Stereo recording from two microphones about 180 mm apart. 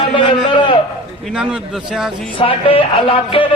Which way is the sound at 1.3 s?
5° right (ahead or behind).